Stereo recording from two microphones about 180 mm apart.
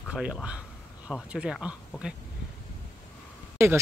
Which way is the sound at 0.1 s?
5° right (ahead or behind).